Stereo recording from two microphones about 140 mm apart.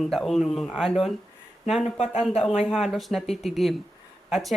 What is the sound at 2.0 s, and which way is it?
Speech, 45° left (ahead or behind).